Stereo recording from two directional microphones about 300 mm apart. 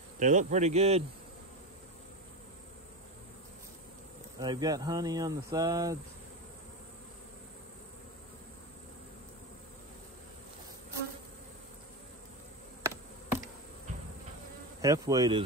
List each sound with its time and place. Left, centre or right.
0.2 s speech: right
4.4 s speech: centre
14.8 s speech: centre